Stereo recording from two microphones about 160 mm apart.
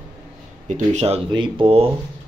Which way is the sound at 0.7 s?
45° right (ahead or behind).